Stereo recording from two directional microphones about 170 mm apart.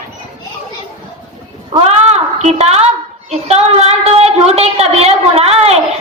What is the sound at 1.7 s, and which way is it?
Cat, 35° right (ahead or behind).